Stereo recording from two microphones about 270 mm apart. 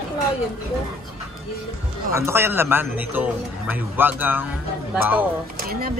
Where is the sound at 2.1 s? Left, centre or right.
Centre.